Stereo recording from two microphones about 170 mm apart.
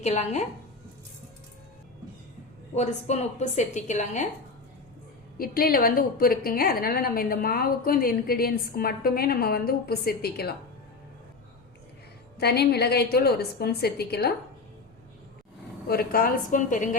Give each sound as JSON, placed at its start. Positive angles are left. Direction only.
{"t": 0.0, "sound": "speech", "side_deg": 40}
{"t": 2.7, "sound": "a woman's voice", "side_deg": 40}
{"t": 5.4, "sound": "a woman's voice", "side_deg": 60}
{"t": 12.4, "sound": "a woman's voice", "side_deg": 70}
{"t": 15.9, "sound": "a woman's voice", "side_deg": 60}